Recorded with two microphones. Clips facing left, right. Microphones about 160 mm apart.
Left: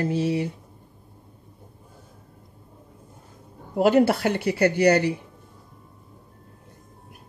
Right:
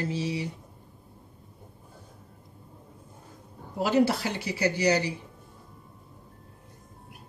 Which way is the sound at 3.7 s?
55° left (ahead or behind).